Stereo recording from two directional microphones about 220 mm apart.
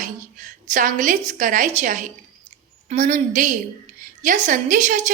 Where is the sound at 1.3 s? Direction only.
35° right (ahead or behind).